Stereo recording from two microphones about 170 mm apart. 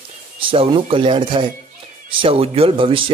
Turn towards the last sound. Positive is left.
turn(degrees=-30)  # may be behind; listen again after turning